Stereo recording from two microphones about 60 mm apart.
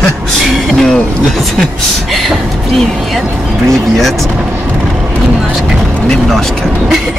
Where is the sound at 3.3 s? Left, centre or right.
Centre.